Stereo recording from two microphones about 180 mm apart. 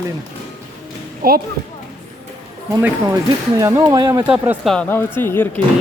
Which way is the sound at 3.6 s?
15° right (ahead or behind).